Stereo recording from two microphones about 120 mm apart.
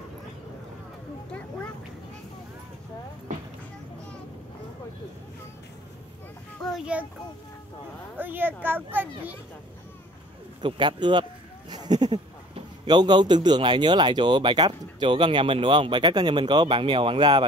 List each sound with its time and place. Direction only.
6.6 s child singing: 5° right (ahead or behind)
8.2 s a sound: 15° right (ahead or behind)
8.6 s speech: 15° right (ahead or behind)
10.6 s speech: 40° right (ahead or behind)
11.7 s a sound: 35° right (ahead or behind)
12.8 s speech: 35° right (ahead or behind)